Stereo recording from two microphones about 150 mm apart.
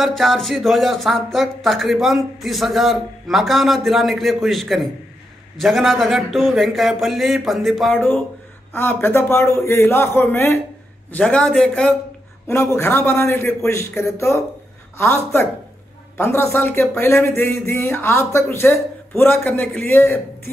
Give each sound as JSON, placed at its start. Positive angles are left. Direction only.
{"t": 0.0, "sound": "speech", "side_deg": 0}
{"t": 7.9, "sound": "speech", "side_deg": 10}
{"t": 12.4, "sound": "speech", "side_deg": 15}